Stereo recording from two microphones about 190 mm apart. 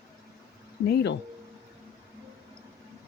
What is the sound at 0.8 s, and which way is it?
Speech, 60° left (ahead or behind).